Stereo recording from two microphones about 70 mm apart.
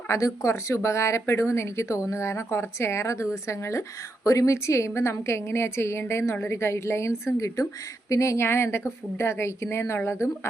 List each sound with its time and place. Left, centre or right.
0.1 s speech: left